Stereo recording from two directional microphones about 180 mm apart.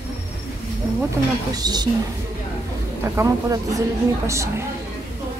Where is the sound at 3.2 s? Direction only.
15° right (ahead or behind).